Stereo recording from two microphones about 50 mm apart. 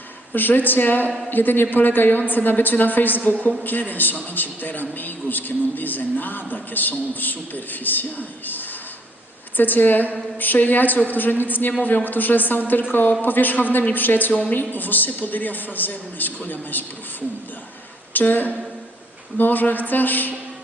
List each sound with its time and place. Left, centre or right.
0.3 s a man's voice: left
9.6 s a man's voice: left